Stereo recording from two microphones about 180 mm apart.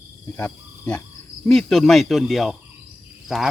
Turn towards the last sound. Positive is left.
turn(degrees=0)  # may be behind; listen again after turning